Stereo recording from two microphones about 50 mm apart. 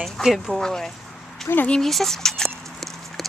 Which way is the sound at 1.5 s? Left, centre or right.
Left.